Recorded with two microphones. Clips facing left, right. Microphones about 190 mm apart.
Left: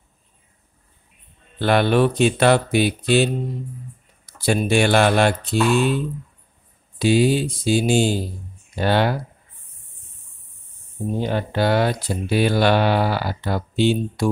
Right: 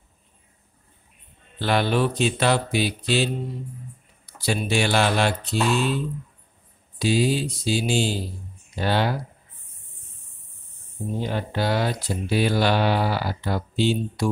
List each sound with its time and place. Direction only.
1.6 s speech: 55° left (ahead or behind)
4.4 s speech: 55° left (ahead or behind)
7.0 s speech: 60° left (ahead or behind)
11.2 s speech: 65° left (ahead or behind)